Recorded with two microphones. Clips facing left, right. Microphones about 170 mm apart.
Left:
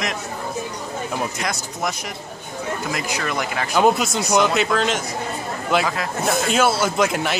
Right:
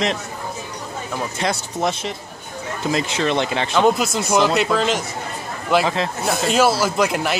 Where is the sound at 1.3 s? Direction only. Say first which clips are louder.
Right 4 dB; 30° right (ahead or behind).